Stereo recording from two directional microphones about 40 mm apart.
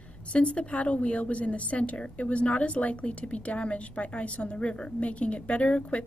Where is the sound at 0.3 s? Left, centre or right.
Left.